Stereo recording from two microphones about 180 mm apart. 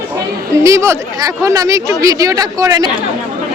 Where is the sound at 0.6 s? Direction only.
15° right (ahead or behind).